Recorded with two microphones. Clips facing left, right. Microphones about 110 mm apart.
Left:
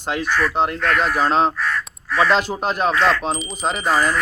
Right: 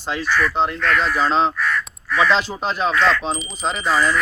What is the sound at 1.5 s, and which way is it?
Speech, 30° left (ahead or behind).